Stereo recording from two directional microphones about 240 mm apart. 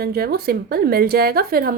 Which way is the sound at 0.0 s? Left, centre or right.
Right.